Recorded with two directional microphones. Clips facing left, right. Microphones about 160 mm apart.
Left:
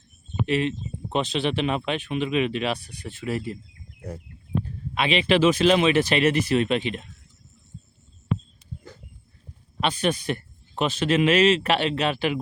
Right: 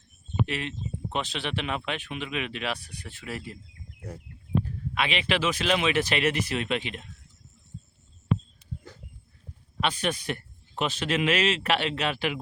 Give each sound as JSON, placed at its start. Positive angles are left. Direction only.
{"t": 0.4, "sound": "speech", "side_deg": 25}
{"t": 4.9, "sound": "speech", "side_deg": 25}
{"t": 9.8, "sound": "speech", "side_deg": 25}